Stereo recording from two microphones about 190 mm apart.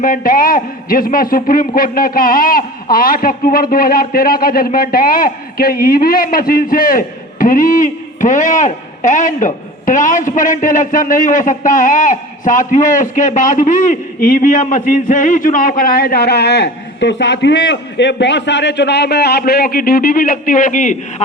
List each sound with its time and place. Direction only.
0.0 s a man's voice: 45° left (ahead or behind)